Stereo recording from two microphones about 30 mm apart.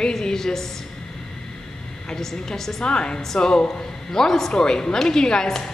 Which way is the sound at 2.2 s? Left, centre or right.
Centre.